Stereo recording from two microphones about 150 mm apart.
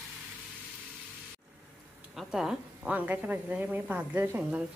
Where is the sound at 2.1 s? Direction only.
5° right (ahead or behind).